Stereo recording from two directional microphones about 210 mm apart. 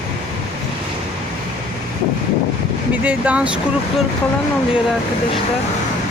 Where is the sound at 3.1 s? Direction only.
5° right (ahead or behind).